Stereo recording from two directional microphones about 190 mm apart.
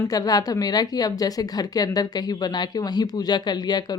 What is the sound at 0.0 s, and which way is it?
Speech, 20° left (ahead or behind).